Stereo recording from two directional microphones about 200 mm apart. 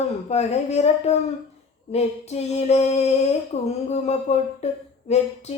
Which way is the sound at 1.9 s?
30° left (ahead or behind).